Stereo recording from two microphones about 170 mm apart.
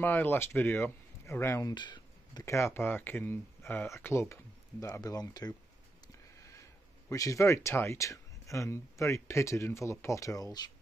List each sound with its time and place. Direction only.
0.0 s speech: 10° left (ahead or behind)
7.1 s speech: 20° left (ahead or behind)